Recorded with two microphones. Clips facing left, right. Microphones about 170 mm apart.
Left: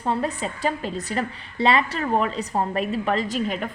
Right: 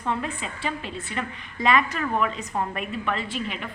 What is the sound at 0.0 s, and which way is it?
A woman's voice, 35° left (ahead or behind).